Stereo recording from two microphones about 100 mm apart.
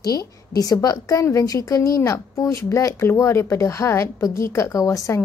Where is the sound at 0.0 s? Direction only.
40° left (ahead or behind).